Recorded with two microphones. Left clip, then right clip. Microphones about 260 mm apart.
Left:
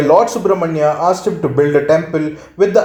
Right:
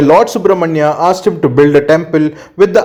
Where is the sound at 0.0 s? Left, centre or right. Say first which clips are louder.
Right 3 dB; right.